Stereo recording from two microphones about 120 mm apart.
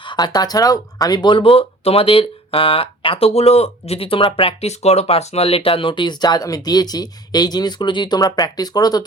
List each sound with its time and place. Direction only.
0.0 s speech: 40° left (ahead or behind)